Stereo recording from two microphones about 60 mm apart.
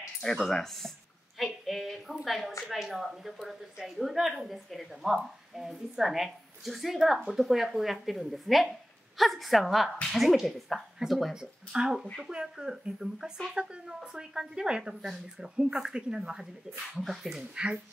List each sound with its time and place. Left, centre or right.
0.2 s speech: centre
1.4 s a sound: centre
2.2 s a woman's voice: centre